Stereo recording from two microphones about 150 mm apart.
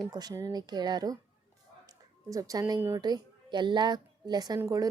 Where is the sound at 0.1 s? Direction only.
25° right (ahead or behind).